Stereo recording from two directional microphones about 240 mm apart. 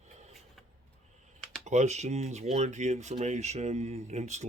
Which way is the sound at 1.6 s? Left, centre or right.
Right.